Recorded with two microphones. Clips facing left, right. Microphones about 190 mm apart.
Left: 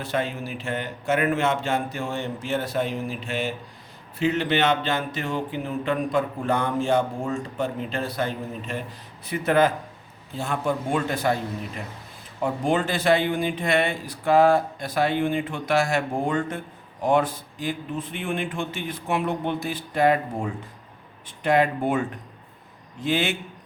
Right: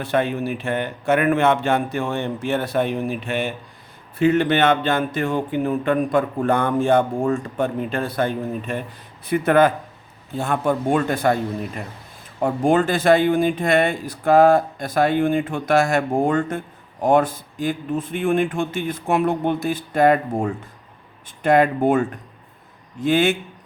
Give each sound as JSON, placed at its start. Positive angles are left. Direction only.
{"t": 0.0, "sound": "a man's voice", "side_deg": -60}
{"t": 12.4, "sound": "speech", "side_deg": -50}
{"t": 23.0, "sound": "speech", "side_deg": -50}